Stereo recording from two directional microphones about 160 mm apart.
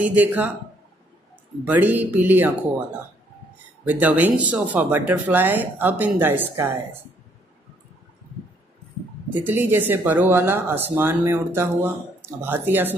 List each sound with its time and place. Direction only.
0.0 s speech: 10° right (ahead or behind)
1.6 s speech: 10° right (ahead or behind)
3.8 s speech: 10° right (ahead or behind)
9.3 s speech: 10° right (ahead or behind)